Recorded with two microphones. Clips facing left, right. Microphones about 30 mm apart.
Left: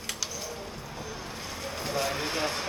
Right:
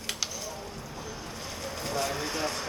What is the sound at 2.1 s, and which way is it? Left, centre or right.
Speech, left.